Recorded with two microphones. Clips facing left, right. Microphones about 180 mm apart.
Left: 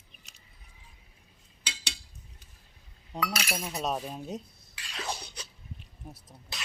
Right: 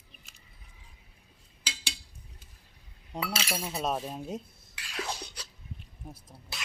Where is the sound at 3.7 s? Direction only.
Centre (ahead or behind).